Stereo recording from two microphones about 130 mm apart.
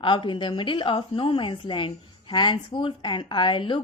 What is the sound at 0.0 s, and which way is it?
Speech, 40° left (ahead or behind).